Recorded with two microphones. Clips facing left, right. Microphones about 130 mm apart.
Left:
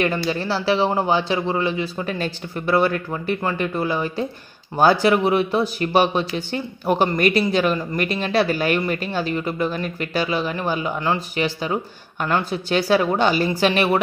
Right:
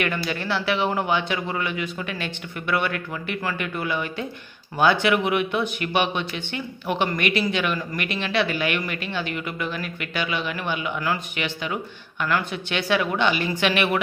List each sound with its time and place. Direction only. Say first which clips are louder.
0.0 s speech: left 4 dB; 30° left (ahead or behind)